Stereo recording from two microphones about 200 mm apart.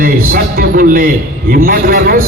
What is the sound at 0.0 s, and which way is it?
A man's voice, 45° right (ahead or behind).